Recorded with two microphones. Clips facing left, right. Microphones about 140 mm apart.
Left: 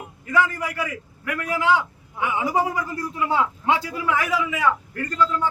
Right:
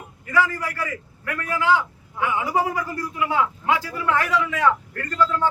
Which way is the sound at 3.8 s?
15° left (ahead or behind).